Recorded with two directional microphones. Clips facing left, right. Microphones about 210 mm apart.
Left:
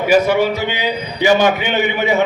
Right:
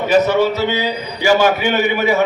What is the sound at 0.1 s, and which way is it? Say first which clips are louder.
A man's voice: even; 10° left (ahead or behind).